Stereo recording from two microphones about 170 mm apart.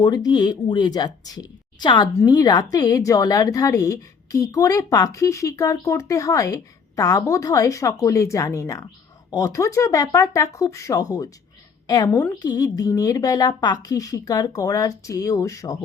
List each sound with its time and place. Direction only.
0.0 s a woman's voice: 20° left (ahead or behind)